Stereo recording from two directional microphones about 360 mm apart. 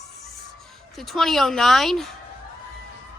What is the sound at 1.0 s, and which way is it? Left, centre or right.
Speech, centre.